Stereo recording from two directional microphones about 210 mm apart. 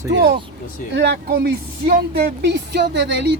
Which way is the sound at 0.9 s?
55° right (ahead or behind).